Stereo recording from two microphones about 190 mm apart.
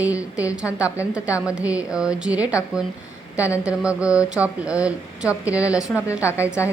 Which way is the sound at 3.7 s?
5° right (ahead or behind).